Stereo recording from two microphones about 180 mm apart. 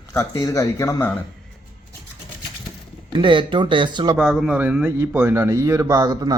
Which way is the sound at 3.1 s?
25° right (ahead or behind).